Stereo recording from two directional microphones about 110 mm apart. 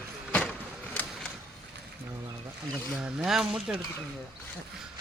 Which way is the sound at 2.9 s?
5° right (ahead or behind).